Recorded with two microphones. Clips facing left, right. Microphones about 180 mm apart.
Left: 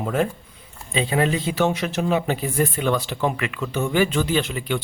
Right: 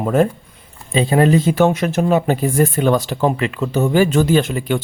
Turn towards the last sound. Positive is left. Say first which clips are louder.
# right 7 dB
turn(degrees=-45)  # may be behind; listen again after turning